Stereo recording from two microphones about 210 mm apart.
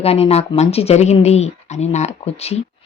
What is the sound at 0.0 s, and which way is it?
Speech, 30° left (ahead or behind).